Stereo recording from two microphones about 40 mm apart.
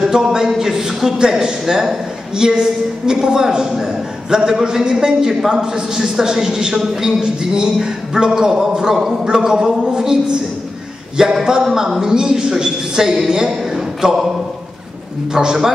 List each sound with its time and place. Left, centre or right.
0.0 s a man's voice: centre
15.3 s a man's voice: centre